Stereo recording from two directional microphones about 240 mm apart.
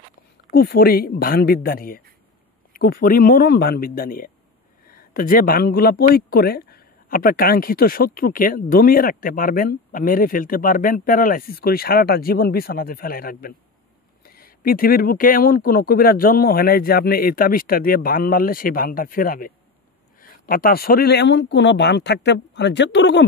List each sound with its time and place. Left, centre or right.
0.5 s speech: left